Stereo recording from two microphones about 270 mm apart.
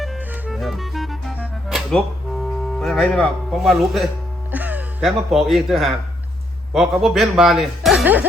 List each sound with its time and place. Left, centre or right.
0.0 s music: centre
2.4 s speech: centre